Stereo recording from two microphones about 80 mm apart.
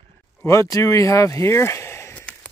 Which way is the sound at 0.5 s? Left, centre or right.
Left.